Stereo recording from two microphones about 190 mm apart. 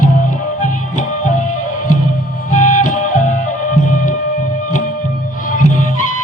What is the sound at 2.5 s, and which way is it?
Music, 45° left (ahead or behind).